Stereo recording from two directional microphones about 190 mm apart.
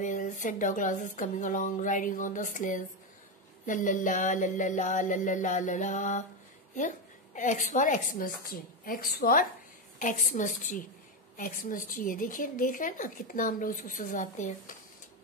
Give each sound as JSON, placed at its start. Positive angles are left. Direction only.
{"t": 0.0, "sound": "a woman's voice", "side_deg": 45}
{"t": 3.6, "sound": "music", "side_deg": 40}
{"t": 7.3, "sound": "a woman's voice", "side_deg": 40}